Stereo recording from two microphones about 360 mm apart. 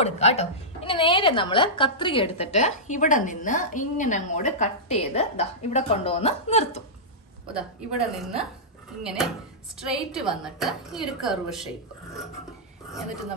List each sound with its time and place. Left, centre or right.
0.0 s a woman's voice: centre
7.5 s a woman's voice: centre